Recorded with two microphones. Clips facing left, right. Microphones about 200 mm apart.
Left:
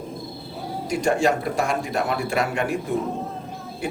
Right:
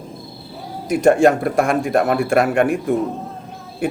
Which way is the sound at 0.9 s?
55° right (ahead or behind).